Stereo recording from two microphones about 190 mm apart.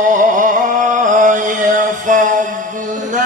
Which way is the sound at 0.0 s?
40° right (ahead or behind).